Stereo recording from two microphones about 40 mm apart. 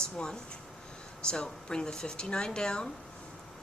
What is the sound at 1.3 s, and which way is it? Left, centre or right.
A woman's voice, centre.